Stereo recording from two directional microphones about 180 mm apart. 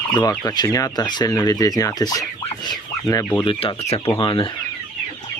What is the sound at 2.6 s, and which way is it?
Fowl, 20° left (ahead or behind).